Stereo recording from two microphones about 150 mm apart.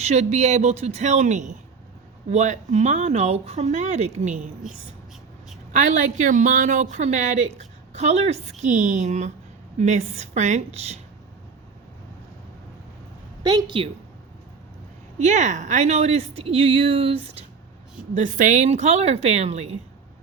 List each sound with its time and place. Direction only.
0.0 s a woman's voice: 45° right (ahead or behind)
5.7 s a woman's voice: 55° right (ahead or behind)
13.4 s a woman's voice: 30° right (ahead or behind)
15.2 s a woman's voice: 55° right (ahead or behind)
18.1 s a woman's voice: 55° right (ahead or behind)